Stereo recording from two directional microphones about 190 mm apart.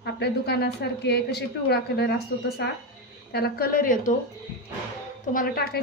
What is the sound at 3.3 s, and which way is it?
Speech, 55° left (ahead or behind).